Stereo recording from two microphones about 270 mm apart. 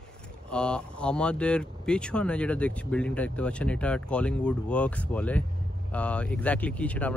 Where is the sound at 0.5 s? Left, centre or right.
Centre.